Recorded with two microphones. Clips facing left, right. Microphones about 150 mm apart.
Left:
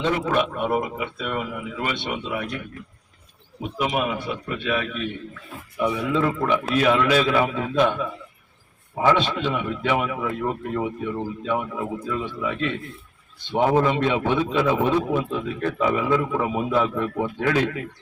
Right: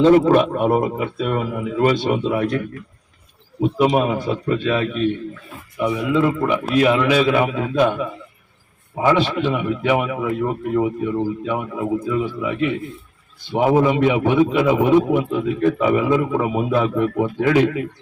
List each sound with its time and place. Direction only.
0.0 s speech: 40° right (ahead or behind)
3.6 s speech: 35° right (ahead or behind)
5.8 s a man's voice: 15° right (ahead or behind)